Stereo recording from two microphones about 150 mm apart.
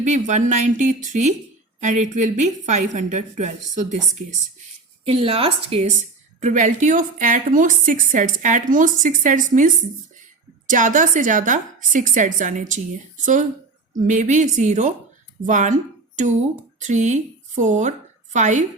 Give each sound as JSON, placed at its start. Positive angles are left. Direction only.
{"t": 0.0, "sound": "a woman's voice", "side_deg": -55}
{"t": 5.0, "sound": "a woman's voice", "side_deg": -40}
{"t": 13.9, "sound": "a woman's voice", "side_deg": -55}